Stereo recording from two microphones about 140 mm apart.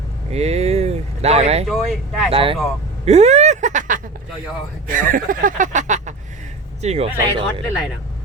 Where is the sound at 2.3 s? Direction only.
40° right (ahead or behind); by 4.0 s 60° right (ahead or behind).